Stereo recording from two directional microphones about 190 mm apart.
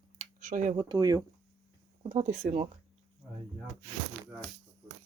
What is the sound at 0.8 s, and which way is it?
Speech, 20° right (ahead or behind).